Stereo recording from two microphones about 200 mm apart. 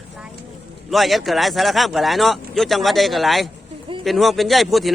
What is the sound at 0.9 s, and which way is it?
A man's voice, centre (ahead or behind).